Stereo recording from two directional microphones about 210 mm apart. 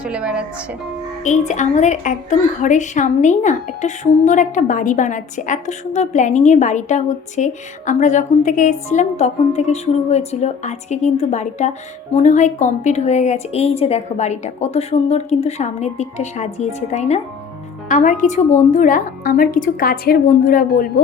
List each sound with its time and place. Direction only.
0.0 s a woman's voice: 5° right (ahead or behind)
1.2 s a woman's voice: 35° left (ahead or behind)